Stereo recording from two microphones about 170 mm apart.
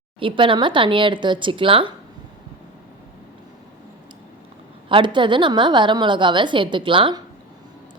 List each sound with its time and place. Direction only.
0.2 s a woman's voice: 30° right (ahead or behind)
4.9 s a woman's voice: 30° right (ahead or behind)